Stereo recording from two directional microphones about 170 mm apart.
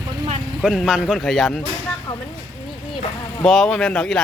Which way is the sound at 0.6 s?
Centre (ahead or behind).